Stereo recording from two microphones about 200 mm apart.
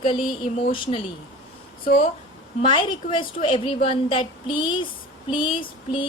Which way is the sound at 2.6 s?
25° left (ahead or behind).